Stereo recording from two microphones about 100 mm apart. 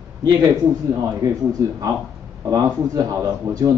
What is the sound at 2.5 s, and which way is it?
Speech, 35° right (ahead or behind).